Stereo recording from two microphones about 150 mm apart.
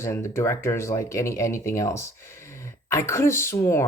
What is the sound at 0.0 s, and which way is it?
Speech, 20° left (ahead or behind).